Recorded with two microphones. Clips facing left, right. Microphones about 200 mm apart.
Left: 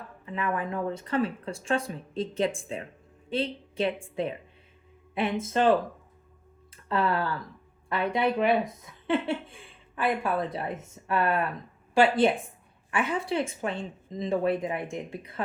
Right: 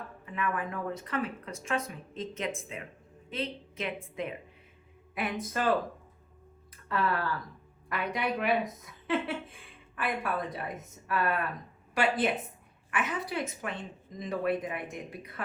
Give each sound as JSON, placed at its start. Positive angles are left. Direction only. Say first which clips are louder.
{"t": 0.3, "sound": "a woman's voice", "louder": "left 3 dB", "side_deg": 30}
{"t": 6.8, "sound": "speech", "louder": "left 4 dB", "side_deg": 25}